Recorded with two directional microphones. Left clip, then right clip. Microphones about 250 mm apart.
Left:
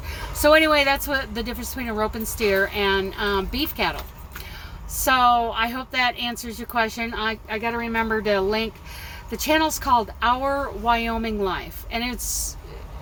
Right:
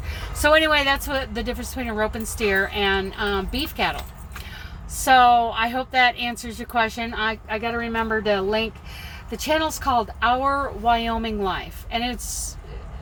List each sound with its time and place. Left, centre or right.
0.4 s speech: centre
5.0 s speech: centre